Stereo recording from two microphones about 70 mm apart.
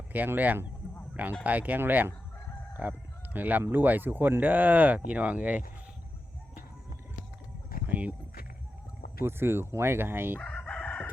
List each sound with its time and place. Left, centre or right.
0.1 s speech: right
3.3 s speech: right
7.9 s a sound: right
9.2 s speech: right
10.4 s crowing: centre